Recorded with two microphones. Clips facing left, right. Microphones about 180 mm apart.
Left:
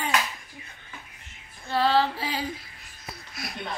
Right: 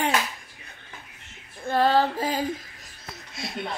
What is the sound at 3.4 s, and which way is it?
Speech, 25° right (ahead or behind).